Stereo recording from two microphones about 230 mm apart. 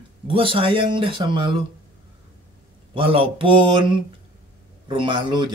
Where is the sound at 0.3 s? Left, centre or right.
Right.